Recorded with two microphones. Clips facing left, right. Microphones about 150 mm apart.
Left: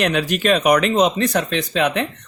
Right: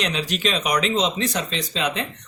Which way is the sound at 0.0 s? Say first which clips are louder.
Left 6 dB; 55° left (ahead or behind).